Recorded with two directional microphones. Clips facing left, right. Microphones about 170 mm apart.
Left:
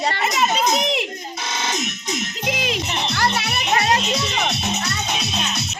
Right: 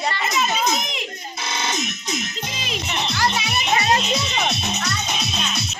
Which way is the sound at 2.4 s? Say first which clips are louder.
Left 5 dB; 75° left (ahead or behind).